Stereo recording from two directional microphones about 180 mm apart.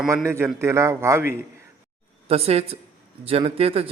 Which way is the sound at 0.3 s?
15° right (ahead or behind).